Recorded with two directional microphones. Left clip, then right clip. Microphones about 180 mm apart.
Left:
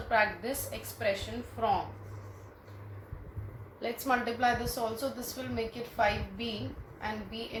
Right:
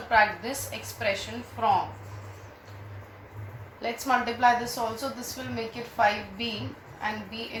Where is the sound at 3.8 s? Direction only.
30° left (ahead or behind).